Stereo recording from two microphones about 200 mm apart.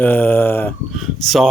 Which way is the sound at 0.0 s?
10° left (ahead or behind).